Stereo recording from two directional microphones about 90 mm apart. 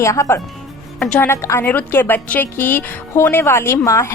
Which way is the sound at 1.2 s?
25° left (ahead or behind).